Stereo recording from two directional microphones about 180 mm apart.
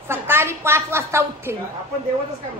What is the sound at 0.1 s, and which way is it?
A woman's voice, 15° right (ahead or behind).